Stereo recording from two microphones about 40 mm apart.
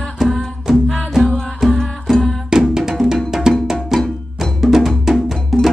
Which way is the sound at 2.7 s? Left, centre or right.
Centre.